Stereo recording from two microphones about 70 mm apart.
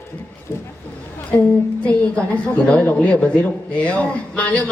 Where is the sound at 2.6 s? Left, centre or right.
Centre.